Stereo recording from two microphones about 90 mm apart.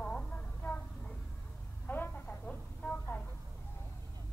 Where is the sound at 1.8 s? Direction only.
20° left (ahead or behind).